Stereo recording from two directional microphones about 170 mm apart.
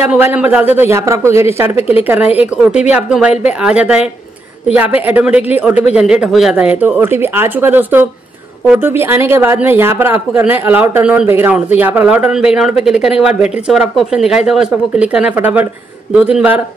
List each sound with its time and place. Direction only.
0.1 s speech: 10° right (ahead or behind)